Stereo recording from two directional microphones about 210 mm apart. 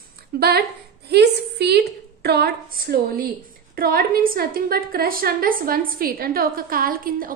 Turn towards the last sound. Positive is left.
turn(degrees=-45)  # may be behind; listen again after turning